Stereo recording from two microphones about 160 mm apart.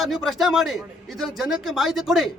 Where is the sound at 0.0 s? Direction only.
Centre (ahead or behind).